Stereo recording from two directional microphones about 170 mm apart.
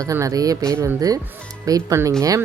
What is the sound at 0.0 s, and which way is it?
Speech, 20° right (ahead or behind).